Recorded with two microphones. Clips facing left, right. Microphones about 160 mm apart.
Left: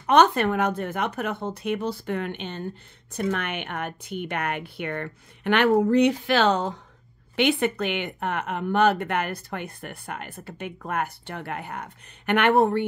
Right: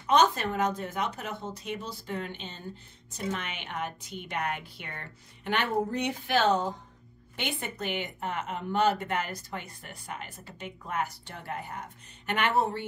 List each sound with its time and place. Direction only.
0.0 s speech: 60° left (ahead or behind)